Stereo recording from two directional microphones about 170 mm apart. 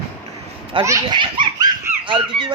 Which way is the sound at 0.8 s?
25° right (ahead or behind).